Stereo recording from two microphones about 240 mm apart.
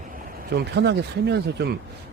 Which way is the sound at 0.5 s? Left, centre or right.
Right.